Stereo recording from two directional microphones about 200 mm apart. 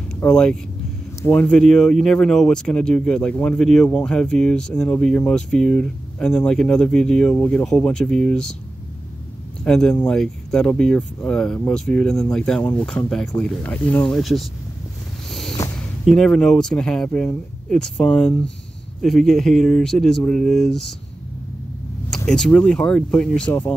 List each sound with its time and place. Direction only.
0.2 s speech: 5° left (ahead or behind)
9.7 s speech: 5° left (ahead or behind)
15.6 s a sound: 15° left (ahead or behind)
16.1 s speech: centre (ahead or behind)
22.1 s speech: 5° left (ahead or behind)